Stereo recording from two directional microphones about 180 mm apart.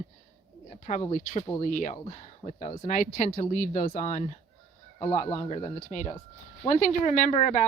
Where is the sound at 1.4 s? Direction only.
30° left (ahead or behind).